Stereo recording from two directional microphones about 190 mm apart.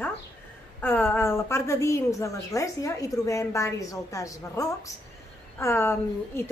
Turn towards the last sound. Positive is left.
turn(degrees=10)  # may be behind; listen again after turning